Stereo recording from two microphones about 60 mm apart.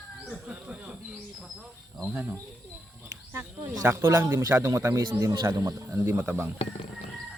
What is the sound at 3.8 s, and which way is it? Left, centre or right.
Speech, right.